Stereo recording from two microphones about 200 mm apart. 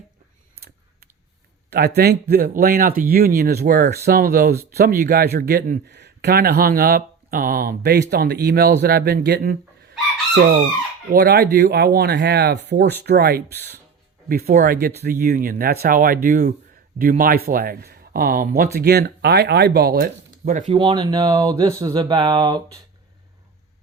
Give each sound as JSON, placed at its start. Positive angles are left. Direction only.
{"t": 1.7, "sound": "speech", "side_deg": -55}
{"t": 11.1, "sound": "speech", "side_deg": -50}
{"t": 20.4, "sound": "speech", "side_deg": -35}
{"t": 20.7, "sound": "speech", "side_deg": -25}